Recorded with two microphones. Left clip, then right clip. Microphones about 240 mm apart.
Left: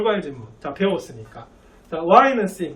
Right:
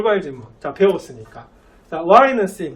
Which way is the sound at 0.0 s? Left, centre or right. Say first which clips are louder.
Right 3 dB; centre.